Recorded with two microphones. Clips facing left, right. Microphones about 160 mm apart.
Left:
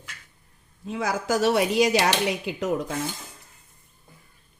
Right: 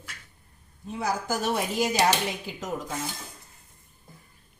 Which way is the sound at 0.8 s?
90° left.